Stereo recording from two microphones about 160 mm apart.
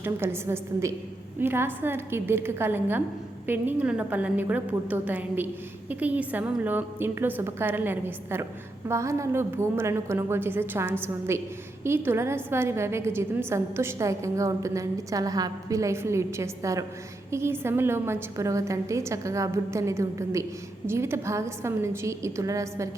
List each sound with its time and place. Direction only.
0.0 s a woman's voice: 15° right (ahead or behind)